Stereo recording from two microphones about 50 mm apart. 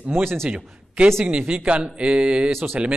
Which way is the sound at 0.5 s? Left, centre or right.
Right.